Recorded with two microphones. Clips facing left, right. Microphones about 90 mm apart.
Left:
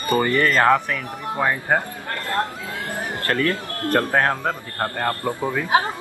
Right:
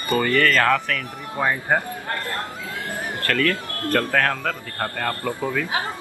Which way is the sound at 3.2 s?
25° left (ahead or behind).